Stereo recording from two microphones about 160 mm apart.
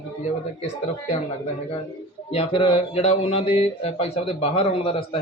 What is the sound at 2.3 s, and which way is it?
Speech, 35° left (ahead or behind).